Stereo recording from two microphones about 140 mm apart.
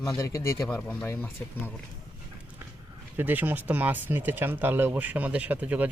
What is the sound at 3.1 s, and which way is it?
Speech, 15° right (ahead or behind).